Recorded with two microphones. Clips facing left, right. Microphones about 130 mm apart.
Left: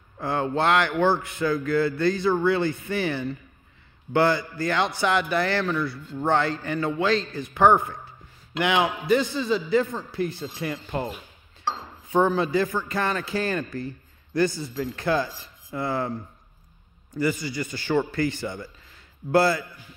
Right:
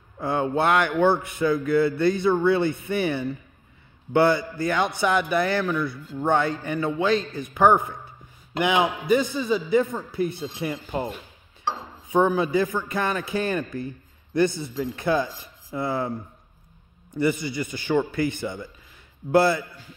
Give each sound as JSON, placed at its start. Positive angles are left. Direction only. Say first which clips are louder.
{"t": 0.2, "sound": "a man's voice", "louder": "right 1 dB", "side_deg": -15}
{"t": 9.1, "sound": "a man's voice", "louder": "even", "side_deg": -10}
{"t": 17.1, "sound": "a man's voice", "louder": "right 2 dB", "side_deg": -25}